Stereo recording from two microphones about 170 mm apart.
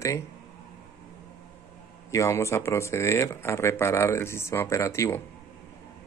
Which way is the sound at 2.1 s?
15° left (ahead or behind).